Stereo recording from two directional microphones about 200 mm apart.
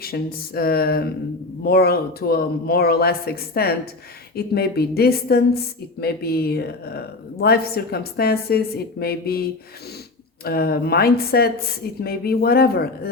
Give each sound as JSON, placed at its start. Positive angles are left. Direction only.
{"t": 0.0, "sound": "speech", "side_deg": 50}